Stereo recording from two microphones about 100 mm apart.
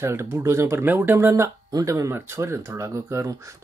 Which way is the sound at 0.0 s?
25° right (ahead or behind).